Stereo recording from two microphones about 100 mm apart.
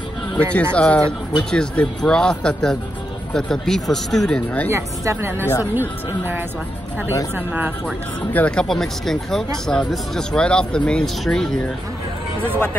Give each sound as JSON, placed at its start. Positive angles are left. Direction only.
{"t": 0.4, "sound": "speech", "side_deg": 15}
{"t": 4.6, "sound": "speech", "side_deg": -25}
{"t": 8.3, "sound": "speech", "side_deg": 15}